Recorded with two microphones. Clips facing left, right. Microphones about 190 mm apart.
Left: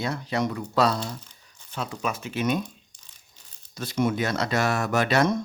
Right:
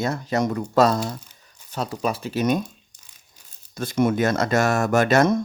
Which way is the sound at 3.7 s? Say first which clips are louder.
Right 4 dB; 50° right (ahead or behind).